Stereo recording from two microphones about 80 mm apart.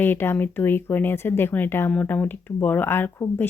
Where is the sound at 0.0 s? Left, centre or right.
Left.